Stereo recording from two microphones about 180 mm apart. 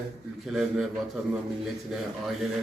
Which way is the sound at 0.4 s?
Centre (ahead or behind).